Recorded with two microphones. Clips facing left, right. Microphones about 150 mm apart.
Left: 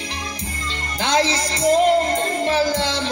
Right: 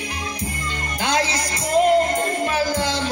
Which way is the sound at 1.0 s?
30° left (ahead or behind).